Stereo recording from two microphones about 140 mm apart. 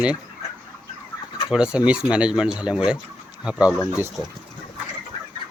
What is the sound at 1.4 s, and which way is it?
Speech, 5° right (ahead or behind).